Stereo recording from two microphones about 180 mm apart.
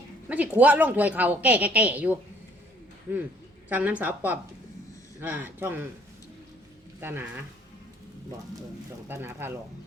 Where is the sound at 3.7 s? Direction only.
10° right (ahead or behind).